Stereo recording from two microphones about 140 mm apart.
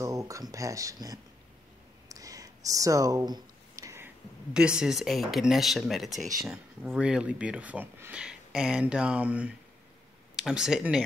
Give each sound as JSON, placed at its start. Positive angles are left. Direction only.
{"t": 0.0, "sound": "speech", "side_deg": -25}
{"t": 2.0, "sound": "a sound", "side_deg": -25}
{"t": 4.6, "sound": "speech", "side_deg": -5}